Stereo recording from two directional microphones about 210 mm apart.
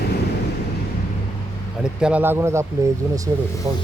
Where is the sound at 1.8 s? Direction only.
5° right (ahead or behind).